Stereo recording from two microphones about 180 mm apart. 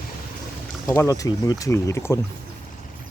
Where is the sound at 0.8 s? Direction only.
15° left (ahead or behind).